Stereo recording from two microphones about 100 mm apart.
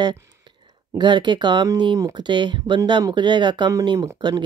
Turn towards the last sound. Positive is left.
turn(degrees=-40)  # may be behind; listen again after turning